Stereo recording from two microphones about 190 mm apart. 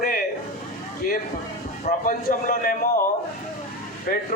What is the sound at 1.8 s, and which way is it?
A man's voice, 45° left (ahead or behind).